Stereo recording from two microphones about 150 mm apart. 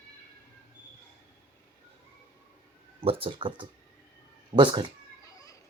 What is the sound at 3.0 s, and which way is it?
Speech, 40° right (ahead or behind).